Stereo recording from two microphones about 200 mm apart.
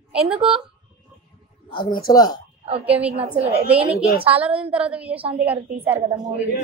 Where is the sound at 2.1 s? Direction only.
20° left (ahead or behind).